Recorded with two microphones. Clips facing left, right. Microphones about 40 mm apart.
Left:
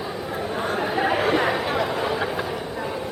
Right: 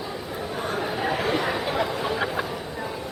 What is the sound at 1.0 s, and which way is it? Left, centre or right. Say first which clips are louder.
Chatter: left 5 dB; left.